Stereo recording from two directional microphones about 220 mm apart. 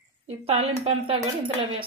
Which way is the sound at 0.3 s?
25° right (ahead or behind).